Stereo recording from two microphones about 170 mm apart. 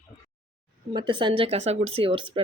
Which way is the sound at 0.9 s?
30° right (ahead or behind).